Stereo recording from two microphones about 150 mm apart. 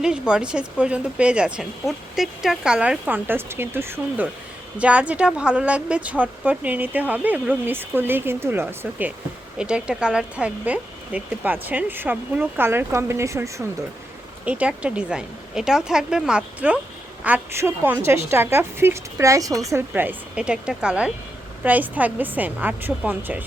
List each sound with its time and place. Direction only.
0.0 s a woman's voice: 5° right (ahead or behind)
14.4 s a woman's voice: 10° right (ahead or behind)